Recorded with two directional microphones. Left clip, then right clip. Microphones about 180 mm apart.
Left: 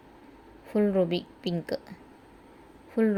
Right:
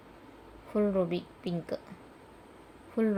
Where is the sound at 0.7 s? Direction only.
50° left (ahead or behind).